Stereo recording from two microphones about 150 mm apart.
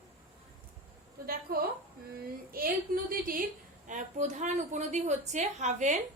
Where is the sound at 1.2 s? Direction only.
80° right.